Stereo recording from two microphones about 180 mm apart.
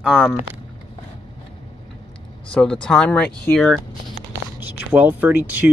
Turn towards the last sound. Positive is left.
turn(degrees=-10)  # may be behind; listen again after turning